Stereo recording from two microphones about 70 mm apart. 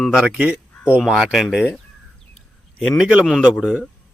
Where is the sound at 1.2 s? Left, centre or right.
Centre.